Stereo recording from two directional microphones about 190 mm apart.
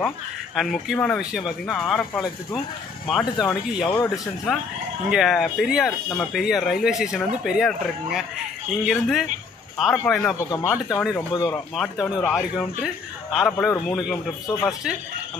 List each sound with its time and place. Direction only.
0.6 s speech: centre (ahead or behind)
5.1 s speech: centre (ahead or behind); by 11.6 s 15° left (ahead or behind)
11.7 s speech: centre (ahead or behind)